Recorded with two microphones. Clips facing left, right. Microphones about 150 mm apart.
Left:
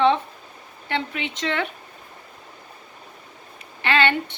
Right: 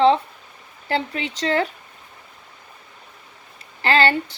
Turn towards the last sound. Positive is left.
turn(degrees=-35)  # may be behind; listen again after turning